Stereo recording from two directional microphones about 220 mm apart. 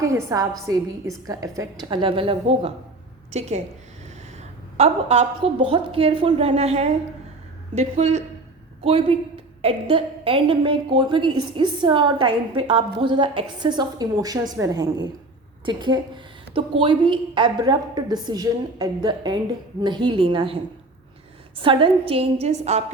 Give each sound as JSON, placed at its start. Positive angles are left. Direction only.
{"t": 0.0, "sound": "a woman's voice", "side_deg": -15}
{"t": 4.8, "sound": "a woman's voice", "side_deg": -25}
{"t": 21.6, "sound": "a woman's voice", "side_deg": -25}